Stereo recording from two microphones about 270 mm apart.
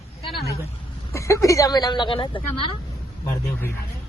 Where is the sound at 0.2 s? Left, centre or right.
Centre.